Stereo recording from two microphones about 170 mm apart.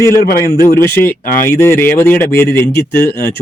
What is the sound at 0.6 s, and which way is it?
Speech, 15° left (ahead or behind).